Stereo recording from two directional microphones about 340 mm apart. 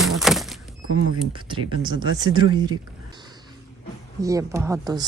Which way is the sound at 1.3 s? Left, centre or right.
Centre.